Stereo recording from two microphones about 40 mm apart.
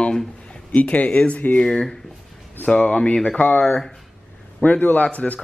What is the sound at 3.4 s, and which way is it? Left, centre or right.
Speech, left.